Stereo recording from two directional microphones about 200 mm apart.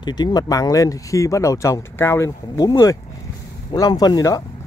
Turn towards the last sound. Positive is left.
turn(degrees=20)  # may be behind; listen again after turning